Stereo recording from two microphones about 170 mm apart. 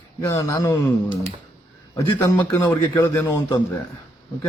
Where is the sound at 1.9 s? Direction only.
20° left (ahead or behind).